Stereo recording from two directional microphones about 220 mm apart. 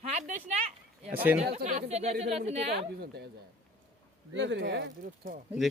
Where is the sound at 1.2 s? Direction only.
10° right (ahead or behind).